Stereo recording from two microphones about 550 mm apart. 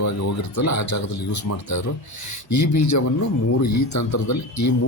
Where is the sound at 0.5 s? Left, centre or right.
Left.